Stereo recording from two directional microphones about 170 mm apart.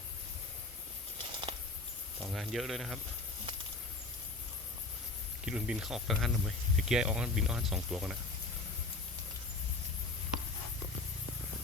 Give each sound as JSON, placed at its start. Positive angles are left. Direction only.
{"t": 1.3, "sound": "a sound", "side_deg": -30}
{"t": 2.2, "sound": "speech", "side_deg": 0}
{"t": 5.5, "sound": "speech", "side_deg": -5}